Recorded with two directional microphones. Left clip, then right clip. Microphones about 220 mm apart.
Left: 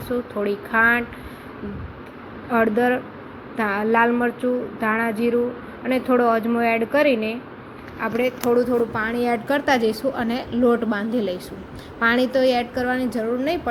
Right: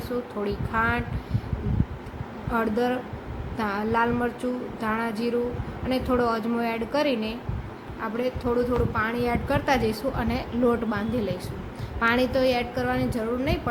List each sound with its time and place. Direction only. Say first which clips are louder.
0.4 s a woman's voice: left 8 dB; 10° left (ahead or behind)
2.5 s a woman's voice: left 6 dB; 5° left (ahead or behind)